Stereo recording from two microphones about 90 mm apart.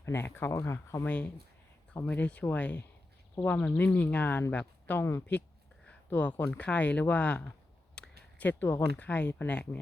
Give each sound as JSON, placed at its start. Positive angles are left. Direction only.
{"t": 0.0, "sound": "speech", "side_deg": 25}
{"t": 1.0, "sound": "speech", "side_deg": 20}